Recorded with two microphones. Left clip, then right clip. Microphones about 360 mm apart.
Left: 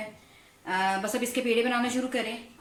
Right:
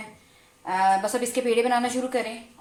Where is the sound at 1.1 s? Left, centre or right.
Centre.